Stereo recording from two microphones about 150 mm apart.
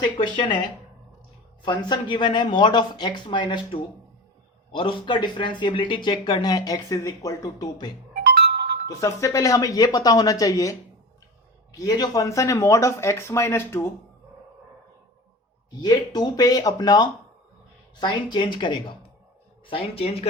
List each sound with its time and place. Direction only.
0.0 s speech: 35° left (ahead or behind)
1.6 s speech: 30° left (ahead or behind)
8.4 s music: 90° right
8.9 s speech: 20° left (ahead or behind)
15.8 s speech: 30° left (ahead or behind)